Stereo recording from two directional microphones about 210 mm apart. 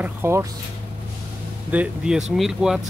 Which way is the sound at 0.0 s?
10° right (ahead or behind).